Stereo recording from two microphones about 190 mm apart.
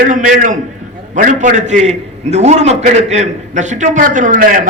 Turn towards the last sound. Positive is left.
turn(degrees=-45)  # may be behind; listen again after turning